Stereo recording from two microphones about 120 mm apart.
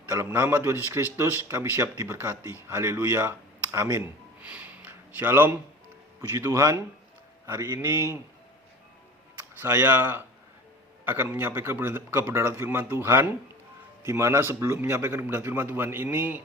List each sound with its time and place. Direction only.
0.3 s a man's voice: 15° right (ahead or behind)
4.4 s a sound: 10° right (ahead or behind)
6.2 s a man's voice: 20° right (ahead or behind)
9.6 s a man's voice: 20° right (ahead or behind)